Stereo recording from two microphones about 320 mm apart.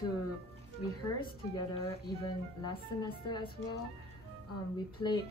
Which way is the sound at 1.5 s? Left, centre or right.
Centre.